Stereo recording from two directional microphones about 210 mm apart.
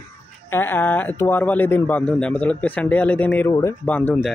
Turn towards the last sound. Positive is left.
turn(degrees=10)  # may be behind; listen again after turning